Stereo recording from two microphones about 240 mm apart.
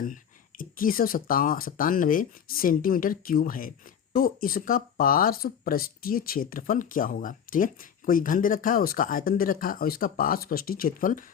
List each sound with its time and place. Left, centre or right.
0.0 s speech: left